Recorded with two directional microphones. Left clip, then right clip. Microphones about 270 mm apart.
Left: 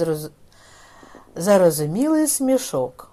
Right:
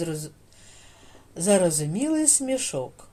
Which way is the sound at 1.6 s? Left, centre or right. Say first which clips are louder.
Left 7 dB; centre.